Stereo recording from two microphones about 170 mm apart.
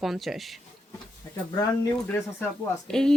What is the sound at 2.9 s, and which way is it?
Speech, 5° left (ahead or behind).